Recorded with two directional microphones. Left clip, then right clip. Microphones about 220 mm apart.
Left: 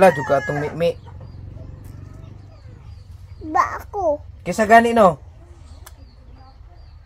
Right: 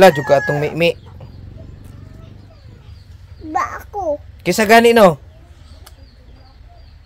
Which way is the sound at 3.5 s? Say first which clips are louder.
Left 1 dB; 5° right (ahead or behind).